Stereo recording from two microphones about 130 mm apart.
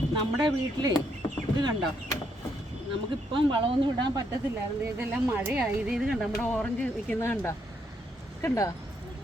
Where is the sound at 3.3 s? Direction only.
40° right (ahead or behind).